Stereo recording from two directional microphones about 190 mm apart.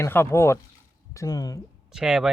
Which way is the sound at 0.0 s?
15° left (ahead or behind).